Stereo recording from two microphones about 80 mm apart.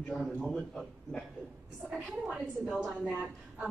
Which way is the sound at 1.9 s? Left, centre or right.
Centre.